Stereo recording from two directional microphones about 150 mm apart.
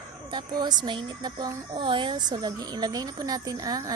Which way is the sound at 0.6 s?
30° right (ahead or behind).